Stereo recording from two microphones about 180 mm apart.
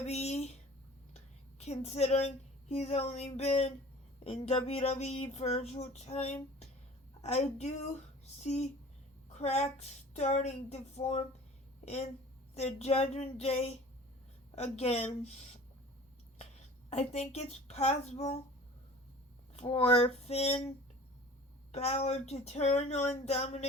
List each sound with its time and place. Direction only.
0.0 s a sound: 35° left (ahead or behind)
1.1 s a woman's voice: 35° left (ahead or behind)
12.5 s speech: 35° left (ahead or behind)
16.9 s speech: 35° left (ahead or behind)
19.5 s speech: 30° left (ahead or behind)
21.7 s speech: 35° left (ahead or behind)